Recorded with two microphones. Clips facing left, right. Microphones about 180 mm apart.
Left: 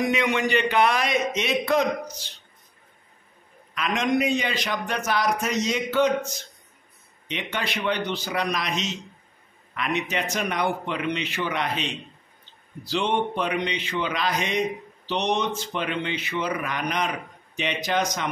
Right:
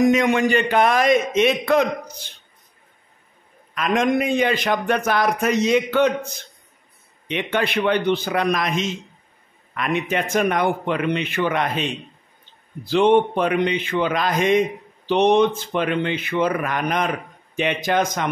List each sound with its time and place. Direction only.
0.0 s a man's voice: 45° right (ahead or behind)
3.7 s a man's voice: 50° right (ahead or behind)